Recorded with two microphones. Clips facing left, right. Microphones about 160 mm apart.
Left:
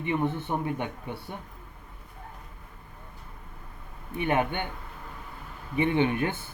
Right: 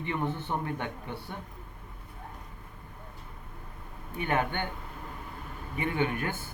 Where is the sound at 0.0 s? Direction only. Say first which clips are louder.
Left 4 dB; 15° left (ahead or behind).